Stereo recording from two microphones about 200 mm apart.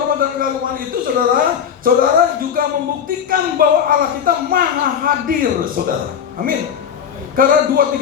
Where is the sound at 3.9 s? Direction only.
45° right (ahead or behind).